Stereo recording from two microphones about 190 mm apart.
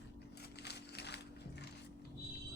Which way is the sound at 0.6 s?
60° left (ahead or behind).